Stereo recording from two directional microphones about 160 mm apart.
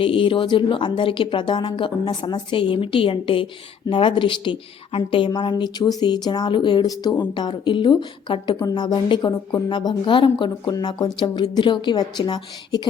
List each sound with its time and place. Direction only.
0.0 s a woman's voice: 30° left (ahead or behind)